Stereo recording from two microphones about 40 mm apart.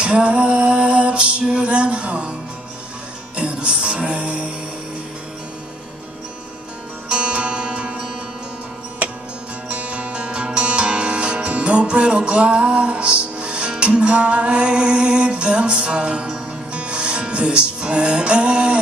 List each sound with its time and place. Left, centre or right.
0.0 s music: right
3.3 s music: right
7.1 s music: right
9.7 s music: right